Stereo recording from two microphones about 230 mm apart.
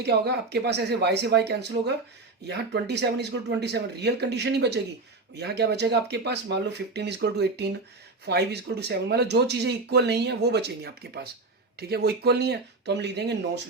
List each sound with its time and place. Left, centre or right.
0.0 s speech: right